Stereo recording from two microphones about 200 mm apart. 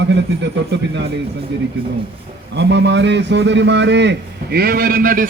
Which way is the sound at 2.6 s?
60° right (ahead or behind).